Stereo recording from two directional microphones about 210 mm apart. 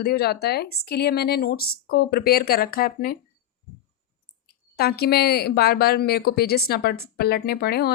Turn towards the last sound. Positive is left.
turn(degrees=50)  # may be behind; listen again after turning